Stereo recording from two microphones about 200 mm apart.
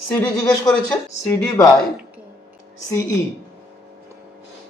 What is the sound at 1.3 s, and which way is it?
Speech, 10° left (ahead or behind).